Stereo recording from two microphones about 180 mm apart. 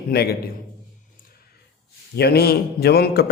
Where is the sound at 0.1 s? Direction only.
60° left (ahead or behind).